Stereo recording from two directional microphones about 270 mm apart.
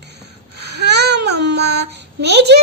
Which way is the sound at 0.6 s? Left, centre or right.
Right.